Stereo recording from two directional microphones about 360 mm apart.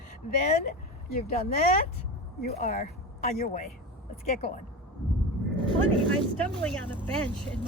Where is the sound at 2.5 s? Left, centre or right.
Left.